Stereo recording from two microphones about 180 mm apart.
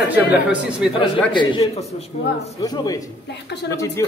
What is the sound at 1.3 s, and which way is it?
Speech, 25° left (ahead or behind).